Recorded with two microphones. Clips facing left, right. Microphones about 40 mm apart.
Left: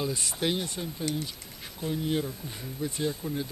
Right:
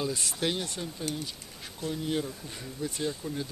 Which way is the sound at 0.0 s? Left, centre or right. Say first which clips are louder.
Left 1 dB; centre.